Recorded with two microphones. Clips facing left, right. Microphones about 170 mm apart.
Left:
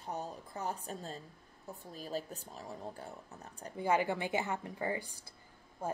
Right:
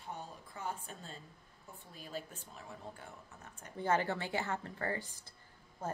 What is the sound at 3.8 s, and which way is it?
Speech, 10° left (ahead or behind).